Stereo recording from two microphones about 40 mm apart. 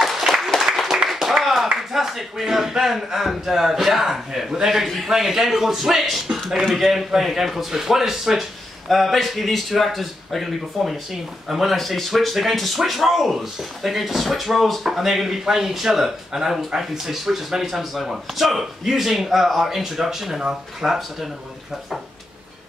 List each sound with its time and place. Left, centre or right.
0.7 s clapping: right
1.0 s clapping: centre
1.9 s a man's voice: centre
8.8 s a man's voice: centre